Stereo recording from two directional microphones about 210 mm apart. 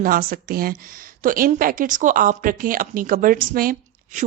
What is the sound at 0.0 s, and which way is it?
Speech, 40° right (ahead or behind).